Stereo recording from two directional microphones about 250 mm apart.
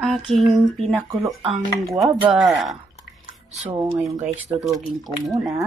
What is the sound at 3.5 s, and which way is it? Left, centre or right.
Speech, right.